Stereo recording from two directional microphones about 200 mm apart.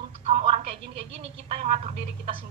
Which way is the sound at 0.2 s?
30° right (ahead or behind).